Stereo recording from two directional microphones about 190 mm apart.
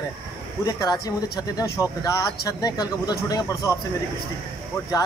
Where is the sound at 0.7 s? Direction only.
20° left (ahead or behind).